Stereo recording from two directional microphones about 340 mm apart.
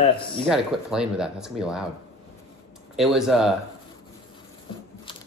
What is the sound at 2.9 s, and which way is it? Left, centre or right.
Speech, centre.